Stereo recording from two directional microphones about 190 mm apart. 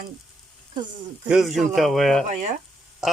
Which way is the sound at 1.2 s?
Centre (ahead or behind).